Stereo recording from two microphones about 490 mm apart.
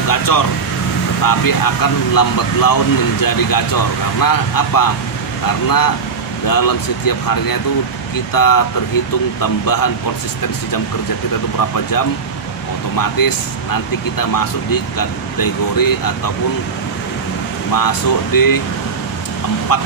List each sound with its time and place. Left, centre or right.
0.1 s vehicle: left
1.2 s speech: left
6.4 s speech: left
11.7 s speech: left
17.7 s speech: left
19.7 s speech: left